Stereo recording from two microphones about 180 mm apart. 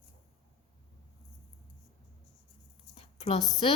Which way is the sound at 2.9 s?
30° left (ahead or behind).